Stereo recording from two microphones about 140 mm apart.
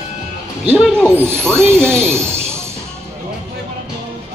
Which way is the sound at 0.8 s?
5° left (ahead or behind).